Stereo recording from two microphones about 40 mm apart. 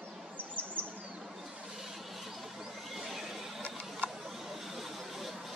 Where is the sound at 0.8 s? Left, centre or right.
Right.